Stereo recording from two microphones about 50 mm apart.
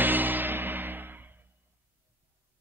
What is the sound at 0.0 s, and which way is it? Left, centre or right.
Music, right.